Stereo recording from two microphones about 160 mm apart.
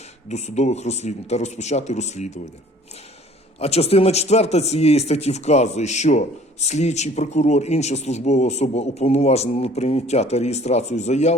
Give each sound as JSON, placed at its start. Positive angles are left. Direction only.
{"t": 0.3, "sound": "a man's voice", "side_deg": 45}
{"t": 3.6, "sound": "a man's voice", "side_deg": 40}